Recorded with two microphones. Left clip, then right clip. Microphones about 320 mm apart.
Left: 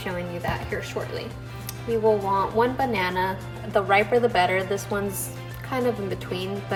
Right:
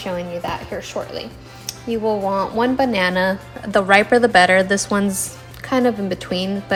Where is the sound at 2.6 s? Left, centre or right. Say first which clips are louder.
Right 5 dB; right.